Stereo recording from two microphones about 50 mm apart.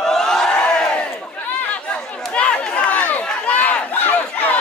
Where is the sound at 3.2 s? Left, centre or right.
Left.